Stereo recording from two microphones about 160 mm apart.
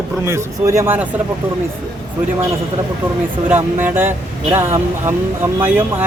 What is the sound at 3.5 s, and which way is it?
Speech, 10° right (ahead or behind).